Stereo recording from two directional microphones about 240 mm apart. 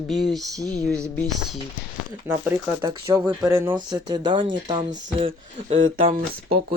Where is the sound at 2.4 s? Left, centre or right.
Centre.